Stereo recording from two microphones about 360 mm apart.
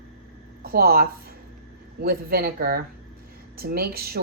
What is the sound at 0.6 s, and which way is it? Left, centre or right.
Speech, right.